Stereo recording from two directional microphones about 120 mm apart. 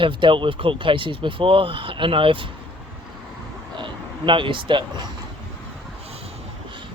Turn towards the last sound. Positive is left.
turn(degrees=-50)  # may be behind; listen again after turning